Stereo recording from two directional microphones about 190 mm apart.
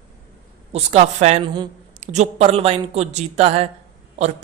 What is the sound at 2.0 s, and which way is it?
A woman's voice, 35° right (ahead or behind).